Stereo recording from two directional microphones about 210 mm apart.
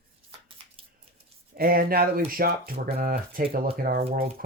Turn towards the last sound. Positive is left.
turn(degrees=-45)  # may be behind; listen again after turning